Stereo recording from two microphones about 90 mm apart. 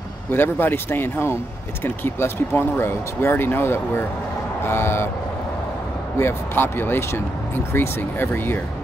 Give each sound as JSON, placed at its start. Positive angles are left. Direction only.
{"t": 0.3, "sound": "speech", "side_deg": 25}
{"t": 6.1, "sound": "speech", "side_deg": 25}